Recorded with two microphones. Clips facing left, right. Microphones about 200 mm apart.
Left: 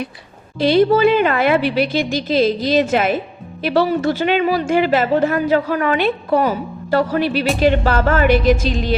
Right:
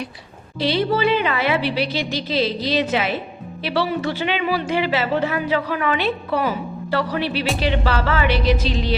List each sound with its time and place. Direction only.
0.6 s speech: 50° left (ahead or behind)